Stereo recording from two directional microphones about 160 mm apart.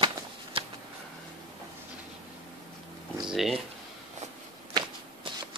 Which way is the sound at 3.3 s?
Centre (ahead or behind).